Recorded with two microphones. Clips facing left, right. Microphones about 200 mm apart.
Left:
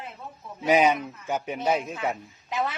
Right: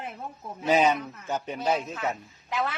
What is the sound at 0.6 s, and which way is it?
A man's voice, 10° left (ahead or behind).